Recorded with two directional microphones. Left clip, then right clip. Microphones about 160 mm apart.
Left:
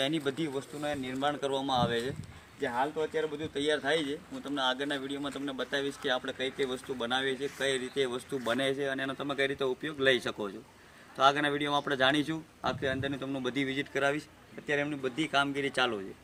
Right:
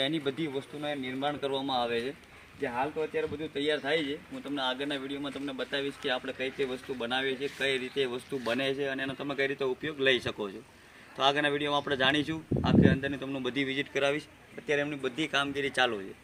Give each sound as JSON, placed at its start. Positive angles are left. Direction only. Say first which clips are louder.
{"t": 0.0, "sound": "speech", "louder": "even", "side_deg": -5}